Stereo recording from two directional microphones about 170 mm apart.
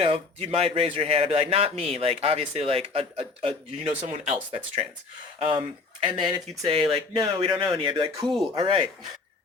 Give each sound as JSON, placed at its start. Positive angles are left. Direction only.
{"t": 0.0, "sound": "a man's voice", "side_deg": -35}